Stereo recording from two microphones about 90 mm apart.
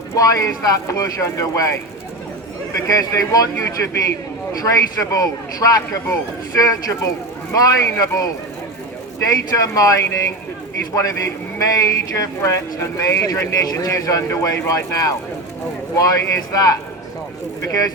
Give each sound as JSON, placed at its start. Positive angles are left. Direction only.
{"t": 0.2, "sound": "speech", "side_deg": 40}
{"t": 2.9, "sound": "speech", "side_deg": 40}
{"t": 9.3, "sound": "speech", "side_deg": 40}